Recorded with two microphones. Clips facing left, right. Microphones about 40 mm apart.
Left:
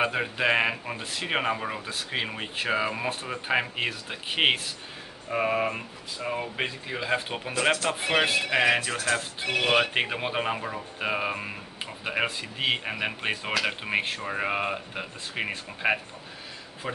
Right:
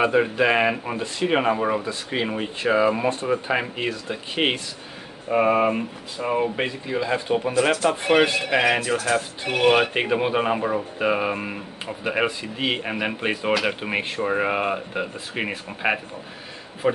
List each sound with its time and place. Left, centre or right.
0.0 s speech: centre
5.3 s speech: centre
6.5 s speech: centre
8.0 s speech: centre
9.8 s speech: centre
13.7 s a man's voice: centre